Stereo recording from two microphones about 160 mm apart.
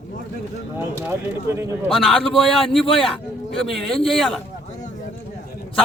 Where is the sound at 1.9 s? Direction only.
Centre (ahead or behind).